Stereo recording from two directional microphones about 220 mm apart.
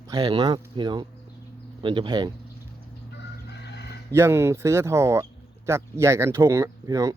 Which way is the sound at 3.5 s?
50° left (ahead or behind).